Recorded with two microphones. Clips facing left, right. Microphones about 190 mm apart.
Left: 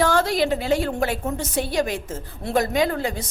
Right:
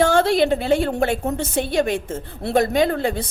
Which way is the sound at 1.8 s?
55° right (ahead or behind).